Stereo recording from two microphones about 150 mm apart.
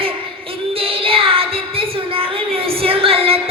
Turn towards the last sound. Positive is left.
turn(degrees=-40)  # may be behind; listen again after turning